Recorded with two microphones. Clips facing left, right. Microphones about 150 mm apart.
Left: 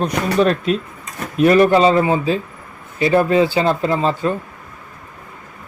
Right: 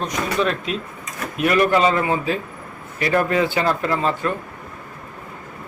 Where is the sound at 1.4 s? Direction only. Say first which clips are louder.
Left 5 dB; 35° left (ahead or behind).